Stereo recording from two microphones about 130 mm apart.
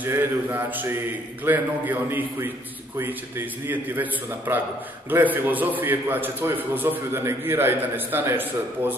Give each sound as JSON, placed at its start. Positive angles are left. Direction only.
{"t": 0.0, "sound": "a man's voice", "side_deg": -15}